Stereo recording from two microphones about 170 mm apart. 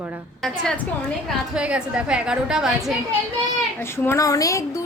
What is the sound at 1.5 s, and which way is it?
A woman's voice, 5° right (ahead or behind).